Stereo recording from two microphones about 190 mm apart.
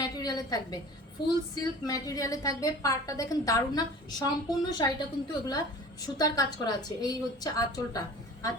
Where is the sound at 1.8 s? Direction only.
20° left (ahead or behind).